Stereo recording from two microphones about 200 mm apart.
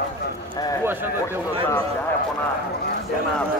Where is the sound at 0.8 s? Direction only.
10° right (ahead or behind).